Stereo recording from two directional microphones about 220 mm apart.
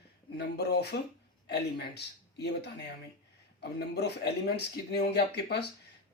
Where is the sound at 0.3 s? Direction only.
50° left (ahead or behind).